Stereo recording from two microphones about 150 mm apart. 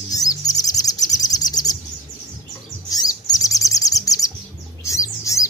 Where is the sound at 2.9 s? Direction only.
25° left (ahead or behind).